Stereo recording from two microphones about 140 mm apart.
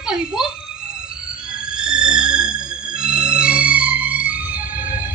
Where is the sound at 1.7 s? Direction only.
5° right (ahead or behind).